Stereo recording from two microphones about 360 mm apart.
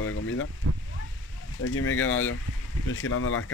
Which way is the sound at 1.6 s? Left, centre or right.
Left.